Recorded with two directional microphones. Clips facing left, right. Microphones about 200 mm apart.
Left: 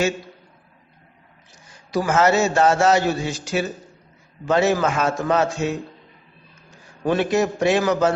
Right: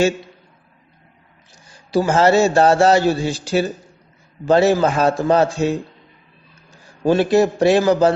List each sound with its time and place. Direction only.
1.7 s a man's voice: 30° right (ahead or behind)
7.0 s a man's voice: 30° right (ahead or behind)